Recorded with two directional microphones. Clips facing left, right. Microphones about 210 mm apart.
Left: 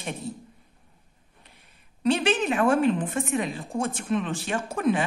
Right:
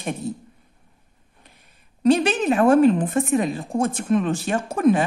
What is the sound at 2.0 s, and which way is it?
A woman's voice, 40° right (ahead or behind).